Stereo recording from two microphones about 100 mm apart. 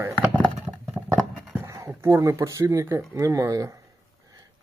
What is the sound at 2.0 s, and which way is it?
Speech, 30° right (ahead or behind).